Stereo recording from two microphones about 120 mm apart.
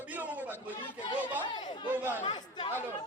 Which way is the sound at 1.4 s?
40° left (ahead or behind).